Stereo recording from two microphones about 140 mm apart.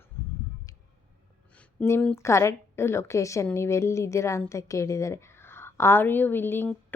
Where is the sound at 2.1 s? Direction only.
20° left (ahead or behind).